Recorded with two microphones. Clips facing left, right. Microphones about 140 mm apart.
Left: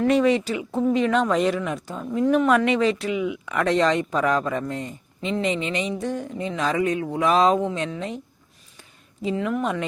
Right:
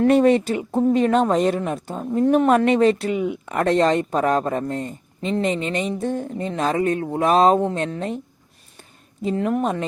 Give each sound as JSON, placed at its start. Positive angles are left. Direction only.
{"t": 0.0, "sound": "speech", "side_deg": -50}
{"t": 9.2, "sound": "speech", "side_deg": -45}